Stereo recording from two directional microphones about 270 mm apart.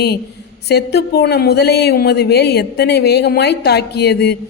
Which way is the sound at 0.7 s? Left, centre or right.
Left.